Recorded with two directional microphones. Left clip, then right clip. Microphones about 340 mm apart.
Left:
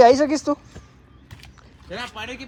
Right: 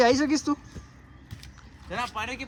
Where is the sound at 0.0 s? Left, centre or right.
Centre.